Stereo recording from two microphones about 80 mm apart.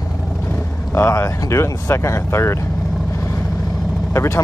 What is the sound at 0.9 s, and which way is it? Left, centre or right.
Speech, left.